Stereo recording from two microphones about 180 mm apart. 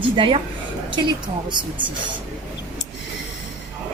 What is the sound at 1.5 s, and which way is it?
Speech, 25° right (ahead or behind).